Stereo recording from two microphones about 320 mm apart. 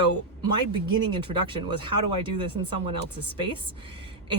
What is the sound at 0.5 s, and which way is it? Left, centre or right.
A woman's voice, centre.